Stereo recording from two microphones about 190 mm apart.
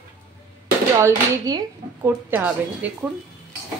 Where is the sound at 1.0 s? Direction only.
15° right (ahead or behind).